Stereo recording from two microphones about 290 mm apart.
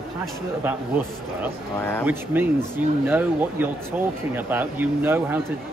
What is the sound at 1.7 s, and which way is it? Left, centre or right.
Speech, centre.